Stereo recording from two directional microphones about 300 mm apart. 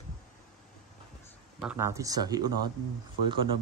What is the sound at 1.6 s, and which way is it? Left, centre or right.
Speech, centre.